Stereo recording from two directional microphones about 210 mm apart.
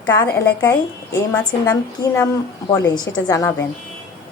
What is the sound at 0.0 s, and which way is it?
A woman's voice, 15° left (ahead or behind).